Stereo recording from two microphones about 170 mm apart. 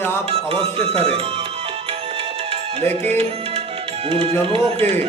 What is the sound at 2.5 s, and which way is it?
Music, 40° right (ahead or behind).